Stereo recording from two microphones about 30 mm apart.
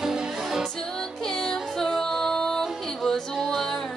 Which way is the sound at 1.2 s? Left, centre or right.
Left.